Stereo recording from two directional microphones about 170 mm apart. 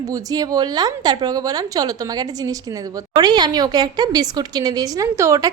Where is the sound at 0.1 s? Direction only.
20° right (ahead or behind).